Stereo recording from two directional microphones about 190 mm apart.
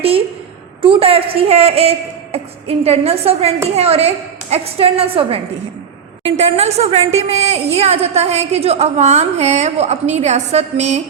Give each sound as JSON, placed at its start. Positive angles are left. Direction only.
{"t": 0.8, "sound": "a woman's voice", "side_deg": -30}